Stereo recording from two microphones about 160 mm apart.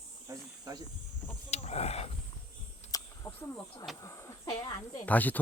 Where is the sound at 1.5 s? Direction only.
45° left (ahead or behind).